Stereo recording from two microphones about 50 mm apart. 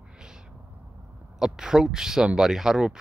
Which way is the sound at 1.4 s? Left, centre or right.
Centre.